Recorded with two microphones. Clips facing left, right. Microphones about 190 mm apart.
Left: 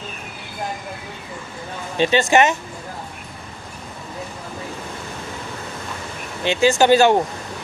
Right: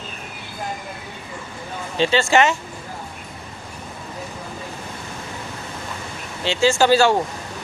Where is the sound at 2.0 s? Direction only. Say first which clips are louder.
Left 1 dB; 15° left (ahead or behind).